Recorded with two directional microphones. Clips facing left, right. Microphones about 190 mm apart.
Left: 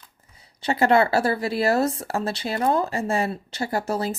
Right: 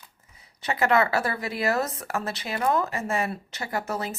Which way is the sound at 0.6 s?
30° left (ahead or behind).